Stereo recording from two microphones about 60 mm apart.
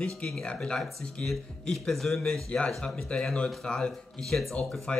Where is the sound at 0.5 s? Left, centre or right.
Centre.